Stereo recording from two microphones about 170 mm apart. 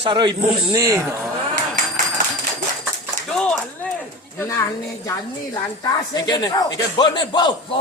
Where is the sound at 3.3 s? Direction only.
5° left (ahead or behind).